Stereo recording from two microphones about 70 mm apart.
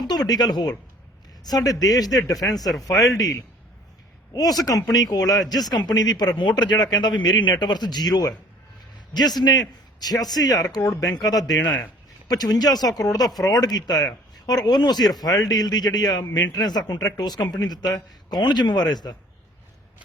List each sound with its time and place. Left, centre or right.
0.1 s speech: left
1.5 s speech: left
2.6 s speech: centre
4.4 s a man's voice: left
9.4 s a man's voice: left
14.7 s speech: left
15.2 s speech: left